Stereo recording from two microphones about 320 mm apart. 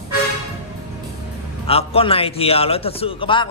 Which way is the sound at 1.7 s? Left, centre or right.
Centre.